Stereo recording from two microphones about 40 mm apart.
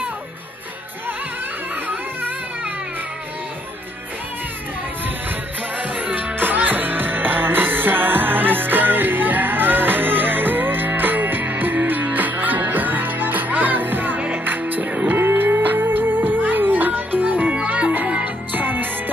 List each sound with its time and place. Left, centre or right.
5.8 s music: right
6.4 s music: right
15.1 s music: right
18.6 s music: right